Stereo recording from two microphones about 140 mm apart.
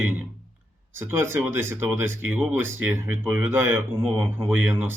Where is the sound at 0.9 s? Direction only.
15° right (ahead or behind).